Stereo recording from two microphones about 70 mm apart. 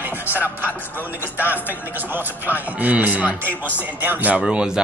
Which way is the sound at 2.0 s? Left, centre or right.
Right.